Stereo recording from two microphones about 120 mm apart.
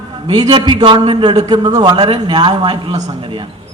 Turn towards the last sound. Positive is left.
turn(degrees=-40)  # may be behind; listen again after turning